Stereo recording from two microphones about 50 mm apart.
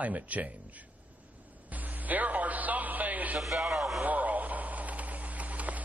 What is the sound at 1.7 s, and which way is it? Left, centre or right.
Music, right.